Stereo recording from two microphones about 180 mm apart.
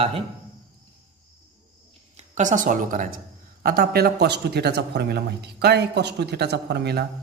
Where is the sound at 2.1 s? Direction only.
40° right (ahead or behind); by 7.0 s 65° right (ahead or behind).